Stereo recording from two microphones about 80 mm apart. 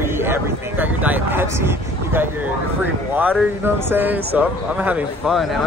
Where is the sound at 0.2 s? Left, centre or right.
Right.